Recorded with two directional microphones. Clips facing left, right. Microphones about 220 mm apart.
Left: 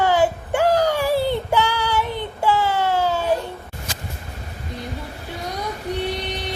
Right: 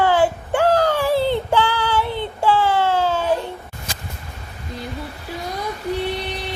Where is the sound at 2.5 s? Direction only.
40° left (ahead or behind).